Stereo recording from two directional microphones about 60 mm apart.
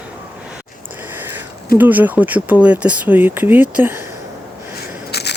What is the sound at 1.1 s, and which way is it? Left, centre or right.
Speech, right.